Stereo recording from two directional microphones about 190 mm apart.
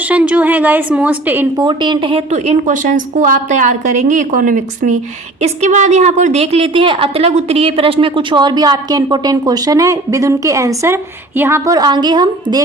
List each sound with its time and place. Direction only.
0.0 s a woman's voice: 5° right (ahead or behind)
1.6 s a woman's voice: 25° right (ahead or behind)